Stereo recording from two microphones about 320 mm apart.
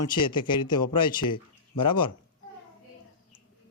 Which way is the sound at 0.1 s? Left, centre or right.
Centre.